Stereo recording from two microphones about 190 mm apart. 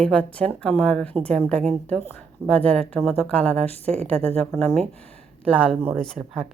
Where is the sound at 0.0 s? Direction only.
5° left (ahead or behind).